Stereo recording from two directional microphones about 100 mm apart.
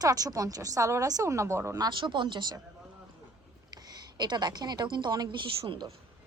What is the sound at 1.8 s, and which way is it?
Speech, 50° right (ahead or behind).